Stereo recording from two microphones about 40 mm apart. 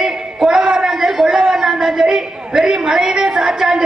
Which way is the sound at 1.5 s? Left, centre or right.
Centre.